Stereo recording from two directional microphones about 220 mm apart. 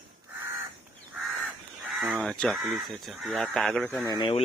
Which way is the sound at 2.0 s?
Centre (ahead or behind).